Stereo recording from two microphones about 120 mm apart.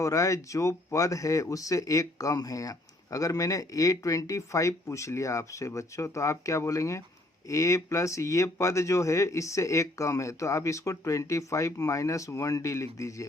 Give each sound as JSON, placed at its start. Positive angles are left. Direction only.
{"t": 0.0, "sound": "speech", "side_deg": 25}